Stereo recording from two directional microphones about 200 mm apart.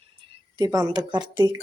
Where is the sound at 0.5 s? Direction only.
20° right (ahead or behind).